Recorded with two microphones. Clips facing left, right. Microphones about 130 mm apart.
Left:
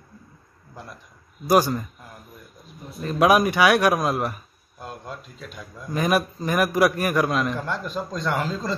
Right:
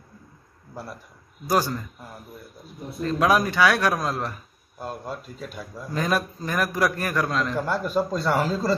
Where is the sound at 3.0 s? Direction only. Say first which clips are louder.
Left 3 dB; 15° left (ahead or behind).